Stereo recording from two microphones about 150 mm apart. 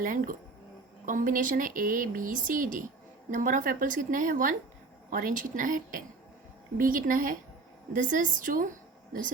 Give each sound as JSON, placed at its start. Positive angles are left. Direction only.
{"t": 0.0, "sound": "speech", "side_deg": -65}